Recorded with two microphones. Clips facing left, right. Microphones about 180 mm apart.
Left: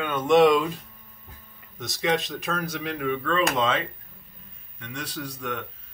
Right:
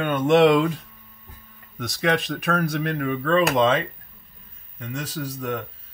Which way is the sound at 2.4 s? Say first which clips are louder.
Right 6 dB; 60° right (ahead or behind).